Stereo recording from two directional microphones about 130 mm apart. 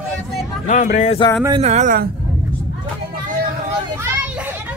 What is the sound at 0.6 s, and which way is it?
Speech, 80° left.